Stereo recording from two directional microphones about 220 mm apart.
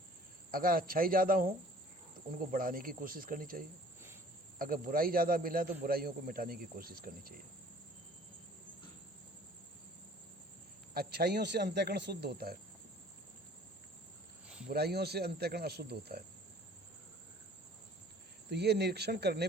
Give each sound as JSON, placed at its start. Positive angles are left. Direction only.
{"t": 0.5, "sound": "a man's voice", "side_deg": -40}
{"t": 10.9, "sound": "speech", "side_deg": -45}
{"t": 14.7, "sound": "speech", "side_deg": -45}
{"t": 18.5, "sound": "speech", "side_deg": -50}